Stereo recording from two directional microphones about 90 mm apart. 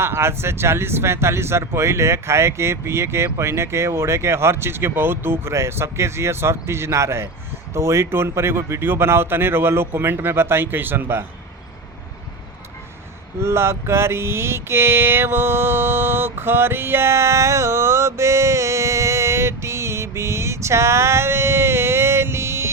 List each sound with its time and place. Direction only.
0.0 s speech: 30° right (ahead or behind)
13.4 s mantra: 30° right (ahead or behind)